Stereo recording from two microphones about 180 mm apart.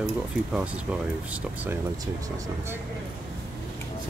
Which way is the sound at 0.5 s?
5° right (ahead or behind).